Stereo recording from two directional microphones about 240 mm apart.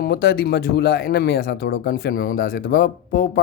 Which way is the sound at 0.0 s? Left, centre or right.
Left.